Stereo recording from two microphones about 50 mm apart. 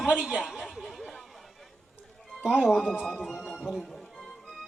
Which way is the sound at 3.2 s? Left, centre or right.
Centre.